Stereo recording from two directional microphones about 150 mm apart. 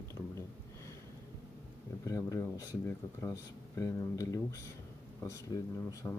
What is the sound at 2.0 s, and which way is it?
Speech, 20° left (ahead or behind).